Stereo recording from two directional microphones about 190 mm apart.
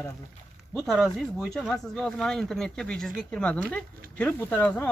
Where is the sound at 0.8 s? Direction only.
Centre (ahead or behind).